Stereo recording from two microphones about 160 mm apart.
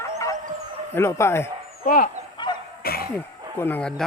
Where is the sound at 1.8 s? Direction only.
60° left (ahead or behind).